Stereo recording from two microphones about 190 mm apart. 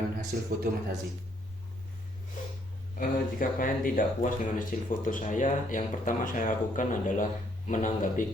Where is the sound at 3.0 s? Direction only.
45° left (ahead or behind).